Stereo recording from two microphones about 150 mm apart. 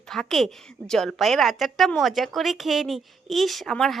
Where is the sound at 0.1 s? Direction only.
Centre (ahead or behind).